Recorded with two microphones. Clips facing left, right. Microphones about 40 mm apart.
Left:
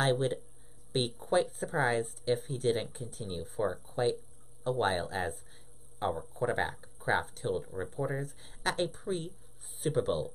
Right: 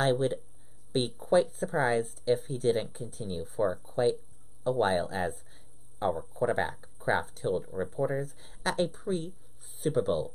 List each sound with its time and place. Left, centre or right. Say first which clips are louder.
0.0 s speech: right 2 dB; centre